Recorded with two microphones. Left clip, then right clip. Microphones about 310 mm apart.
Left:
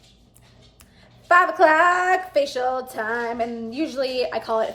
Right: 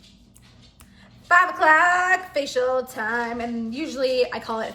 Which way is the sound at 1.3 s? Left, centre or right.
Centre.